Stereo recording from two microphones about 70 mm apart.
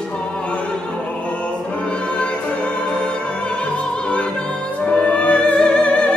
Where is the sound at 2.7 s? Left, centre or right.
Centre.